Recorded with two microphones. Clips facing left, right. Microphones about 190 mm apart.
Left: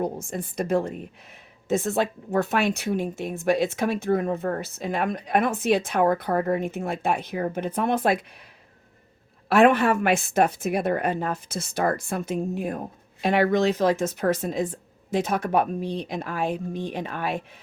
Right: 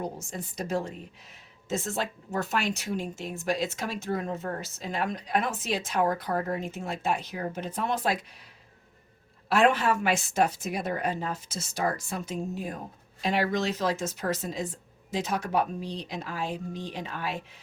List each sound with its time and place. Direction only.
0.0 s speech: 55° left (ahead or behind)
9.5 s speech: 55° left (ahead or behind)